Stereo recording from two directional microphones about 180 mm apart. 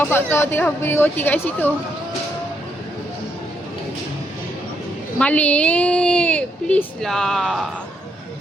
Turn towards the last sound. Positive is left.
turn(degrees=0)  # may be behind; listen again after turning